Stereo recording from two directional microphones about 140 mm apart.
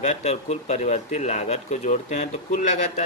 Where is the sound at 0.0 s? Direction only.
50° left (ahead or behind).